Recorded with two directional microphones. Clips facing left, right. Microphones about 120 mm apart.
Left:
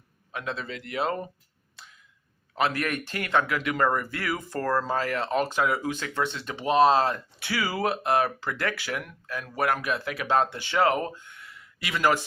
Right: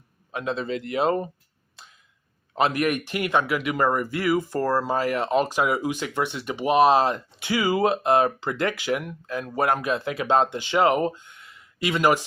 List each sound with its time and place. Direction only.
0.3 s speech: 25° right (ahead or behind)
2.6 s speech: 20° right (ahead or behind)